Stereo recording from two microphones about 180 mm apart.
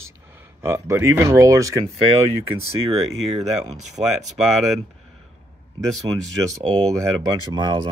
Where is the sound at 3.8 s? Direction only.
40° right (ahead or behind).